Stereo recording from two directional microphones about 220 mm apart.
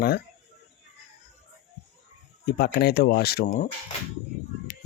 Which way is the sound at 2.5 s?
50° left (ahead or behind).